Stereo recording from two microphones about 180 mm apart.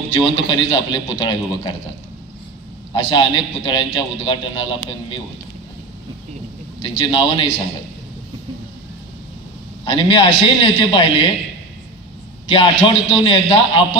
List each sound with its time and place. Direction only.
0.1 s a man's voice: 25° left (ahead or behind)
2.9 s a man's voice: 25° left (ahead or behind)
6.8 s a man's voice: 30° left (ahead or behind)
9.8 s a man's voice: 30° left (ahead or behind)
12.4 s a man's voice: 30° left (ahead or behind)